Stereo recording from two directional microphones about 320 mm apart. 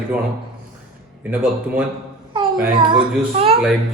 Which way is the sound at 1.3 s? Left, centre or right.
Centre.